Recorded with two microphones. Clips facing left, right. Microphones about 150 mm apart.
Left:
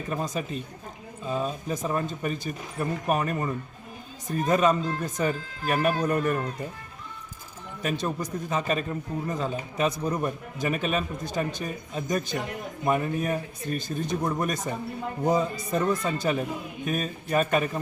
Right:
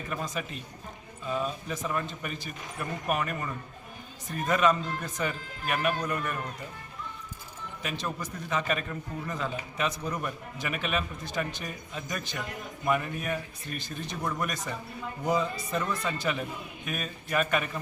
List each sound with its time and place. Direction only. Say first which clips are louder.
0.1 s a man's voice: left 5 dB; 35° left (ahead or behind)
7.8 s a man's voice: left 6 dB; 40° left (ahead or behind)
15.9 s a man's voice: left 5 dB; 45° left (ahead or behind)